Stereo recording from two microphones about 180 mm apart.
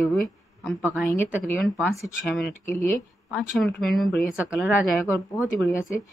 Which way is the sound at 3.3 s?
Centre (ahead or behind).